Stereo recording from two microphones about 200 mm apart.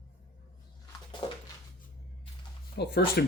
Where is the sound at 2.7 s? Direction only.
55° left (ahead or behind).